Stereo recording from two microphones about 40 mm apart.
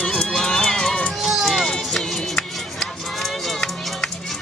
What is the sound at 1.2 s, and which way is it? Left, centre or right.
Music, centre.